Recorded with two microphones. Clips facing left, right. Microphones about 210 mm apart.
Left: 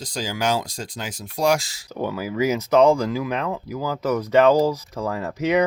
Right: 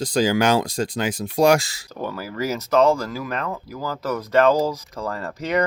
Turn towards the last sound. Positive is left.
turn(degrees=10)  # may be behind; listen again after turning